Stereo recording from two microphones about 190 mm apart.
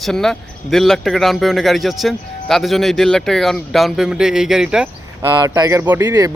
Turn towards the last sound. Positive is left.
turn(degrees=-20)  # may be behind; listen again after turning